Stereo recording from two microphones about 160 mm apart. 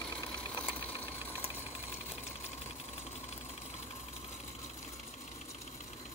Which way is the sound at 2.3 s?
40° left (ahead or behind).